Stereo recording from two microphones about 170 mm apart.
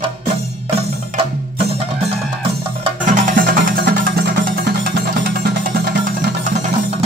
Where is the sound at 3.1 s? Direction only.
50° right (ahead or behind).